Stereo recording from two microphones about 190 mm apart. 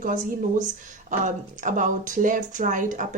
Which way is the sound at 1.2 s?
40° right (ahead or behind).